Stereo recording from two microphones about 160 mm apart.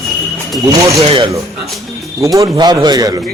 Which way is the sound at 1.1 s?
30° right (ahead or behind).